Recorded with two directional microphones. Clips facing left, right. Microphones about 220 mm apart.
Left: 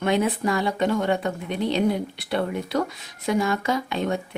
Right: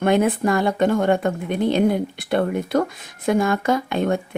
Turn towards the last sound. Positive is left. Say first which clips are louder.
# right 5 dB
turn(degrees=-50)  # may be behind; listen again after turning